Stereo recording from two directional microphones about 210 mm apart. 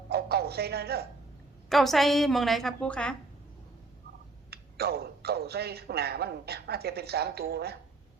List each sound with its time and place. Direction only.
0.1 s music: 50° right (ahead or behind)
1.7 s a woman's voice: centre (ahead or behind)
4.5 s speech: 50° right (ahead or behind)